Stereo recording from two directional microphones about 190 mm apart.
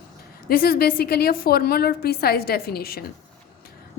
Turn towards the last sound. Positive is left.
turn(degrees=55)  # may be behind; listen again after turning